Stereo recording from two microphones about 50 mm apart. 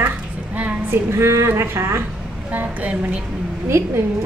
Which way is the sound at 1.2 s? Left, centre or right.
Right.